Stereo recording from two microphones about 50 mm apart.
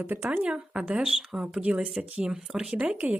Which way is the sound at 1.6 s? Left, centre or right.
Right.